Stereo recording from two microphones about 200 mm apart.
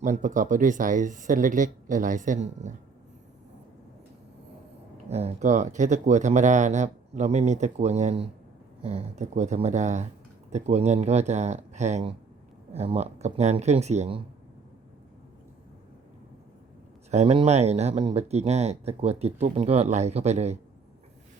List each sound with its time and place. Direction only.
0.0 s speech: 40° right (ahead or behind)
5.0 s speech: 30° right (ahead or behind)
17.1 s speech: 30° right (ahead or behind)